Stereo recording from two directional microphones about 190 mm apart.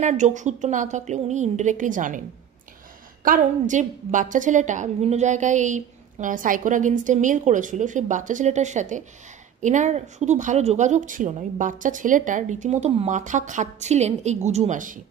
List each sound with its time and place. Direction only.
0.0 s a woman's voice: 40° right (ahead or behind)
3.3 s a woman's voice: 45° right (ahead or behind)